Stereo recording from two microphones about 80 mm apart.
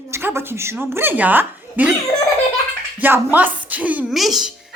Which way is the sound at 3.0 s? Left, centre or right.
Right.